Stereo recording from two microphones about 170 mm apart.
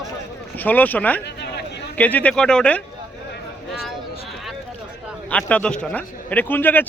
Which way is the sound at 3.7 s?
Centre (ahead or behind).